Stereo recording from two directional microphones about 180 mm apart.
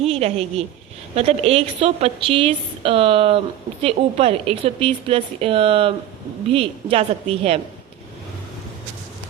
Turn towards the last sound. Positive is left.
turn(degrees=-35)  # may be behind; listen again after turning